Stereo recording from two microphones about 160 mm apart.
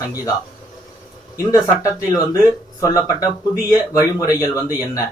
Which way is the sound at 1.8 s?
20° left (ahead or behind).